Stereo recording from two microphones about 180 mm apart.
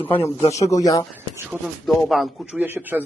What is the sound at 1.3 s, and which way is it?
Speech, 5° right (ahead or behind).